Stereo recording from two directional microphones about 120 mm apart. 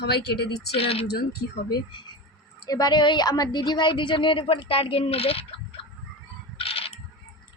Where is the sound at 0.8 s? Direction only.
50° left (ahead or behind).